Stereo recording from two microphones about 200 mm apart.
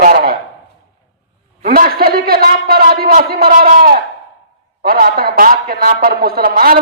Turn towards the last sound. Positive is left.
turn(degrees=-45)  # may be behind; listen again after turning